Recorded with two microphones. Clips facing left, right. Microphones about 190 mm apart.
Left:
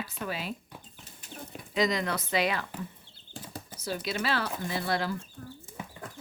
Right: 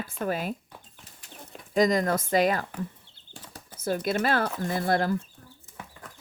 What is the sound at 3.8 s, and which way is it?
Speech, 50° right (ahead or behind).